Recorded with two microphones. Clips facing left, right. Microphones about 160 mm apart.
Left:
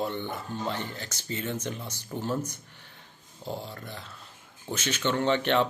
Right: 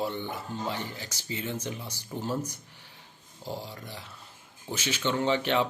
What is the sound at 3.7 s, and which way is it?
Speech, 15° right (ahead or behind).